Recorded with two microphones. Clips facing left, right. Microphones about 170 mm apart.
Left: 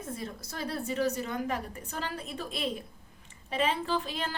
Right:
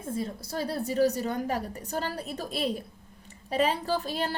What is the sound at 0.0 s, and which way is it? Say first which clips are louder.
A woman's voice: right 5 dB; 30° right (ahead or behind).